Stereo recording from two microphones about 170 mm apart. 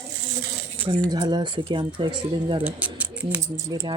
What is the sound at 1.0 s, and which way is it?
Speech, 25° right (ahead or behind).